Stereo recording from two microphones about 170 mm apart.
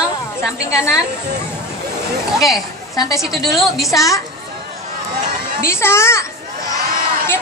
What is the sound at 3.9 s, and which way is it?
Speech, 20° left (ahead or behind).